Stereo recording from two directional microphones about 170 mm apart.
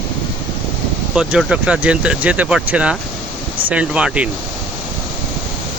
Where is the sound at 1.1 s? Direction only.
5° right (ahead or behind).